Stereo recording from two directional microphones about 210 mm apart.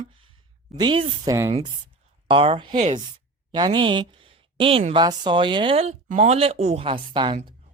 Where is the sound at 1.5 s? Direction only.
30° right (ahead or behind).